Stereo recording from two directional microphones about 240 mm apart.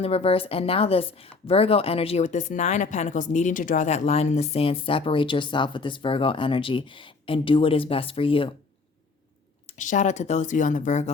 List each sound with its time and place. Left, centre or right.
0.0 s speech: left
9.7 s speech: left